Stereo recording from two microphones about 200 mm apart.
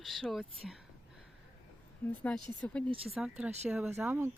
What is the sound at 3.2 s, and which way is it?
A woman's voice, 5° right (ahead or behind).